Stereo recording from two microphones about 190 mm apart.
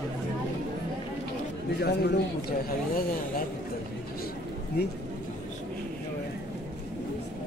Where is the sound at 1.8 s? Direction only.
60° left (ahead or behind).